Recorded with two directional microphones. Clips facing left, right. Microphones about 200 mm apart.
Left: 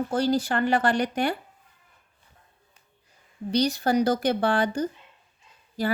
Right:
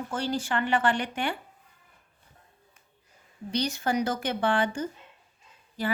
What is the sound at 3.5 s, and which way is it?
Speech, 35° left (ahead or behind).